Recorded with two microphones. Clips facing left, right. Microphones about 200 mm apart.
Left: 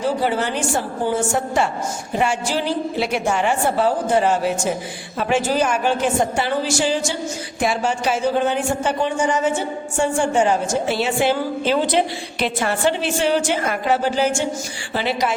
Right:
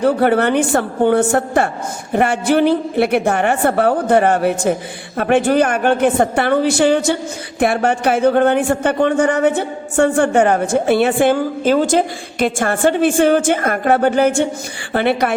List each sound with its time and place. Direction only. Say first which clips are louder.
0.0 s a man's voice: right 7 dB; 60° right (ahead or behind)